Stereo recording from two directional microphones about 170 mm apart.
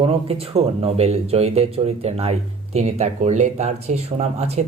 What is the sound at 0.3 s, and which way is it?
Speech, 35° right (ahead or behind).